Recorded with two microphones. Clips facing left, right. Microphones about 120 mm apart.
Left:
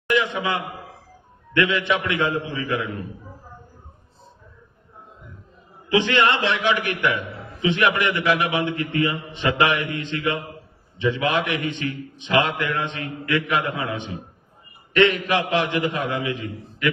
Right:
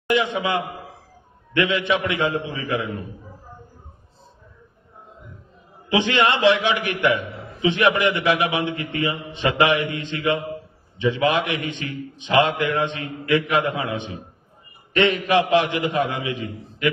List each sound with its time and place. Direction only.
0.1 s a man's voice: 20° right (ahead or behind)
5.9 s a man's voice: 20° right (ahead or behind)
14.9 s a man's voice: 20° right (ahead or behind)